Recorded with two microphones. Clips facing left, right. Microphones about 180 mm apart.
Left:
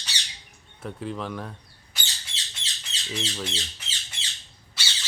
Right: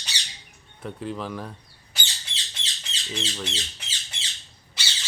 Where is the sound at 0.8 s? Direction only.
Centre (ahead or behind).